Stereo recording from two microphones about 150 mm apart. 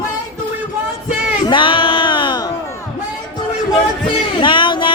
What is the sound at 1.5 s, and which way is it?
Music, 35° left (ahead or behind).